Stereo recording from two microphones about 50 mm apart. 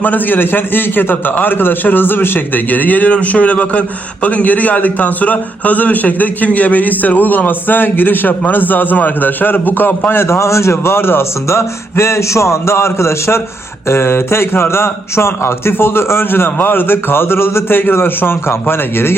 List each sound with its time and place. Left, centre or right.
0.0 s a man's voice: left
10.1 s a man's voice: left